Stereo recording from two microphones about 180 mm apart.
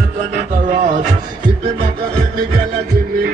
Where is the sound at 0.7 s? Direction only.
45° right (ahead or behind).